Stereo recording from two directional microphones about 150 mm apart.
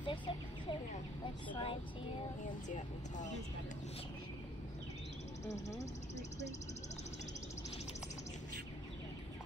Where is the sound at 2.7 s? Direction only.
55° left (ahead or behind).